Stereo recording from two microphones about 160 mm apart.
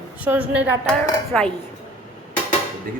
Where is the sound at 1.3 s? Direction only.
5° left (ahead or behind).